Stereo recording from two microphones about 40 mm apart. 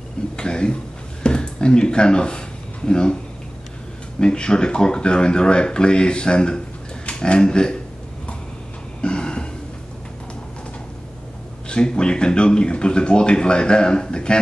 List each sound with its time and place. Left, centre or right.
0.4 s speech: left
4.2 s speech: left
9.0 s a sound: left
11.7 s speech: left